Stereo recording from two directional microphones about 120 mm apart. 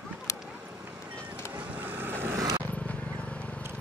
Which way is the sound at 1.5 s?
10° right (ahead or behind).